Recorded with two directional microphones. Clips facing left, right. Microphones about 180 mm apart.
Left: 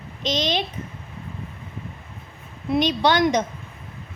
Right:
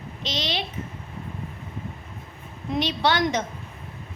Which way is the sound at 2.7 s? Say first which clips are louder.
Left 4 dB; 20° left (ahead or behind).